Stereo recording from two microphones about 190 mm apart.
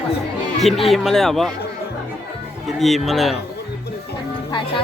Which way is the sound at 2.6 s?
Centre (ahead or behind).